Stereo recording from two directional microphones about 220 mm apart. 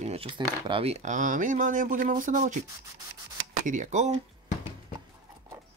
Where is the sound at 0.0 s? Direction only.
25° right (ahead or behind).